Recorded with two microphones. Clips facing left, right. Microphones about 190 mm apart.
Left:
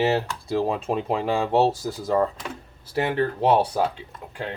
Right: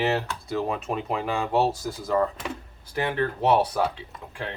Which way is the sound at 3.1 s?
30° left (ahead or behind).